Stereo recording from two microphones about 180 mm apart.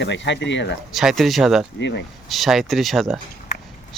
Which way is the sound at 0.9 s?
Centre (ahead or behind).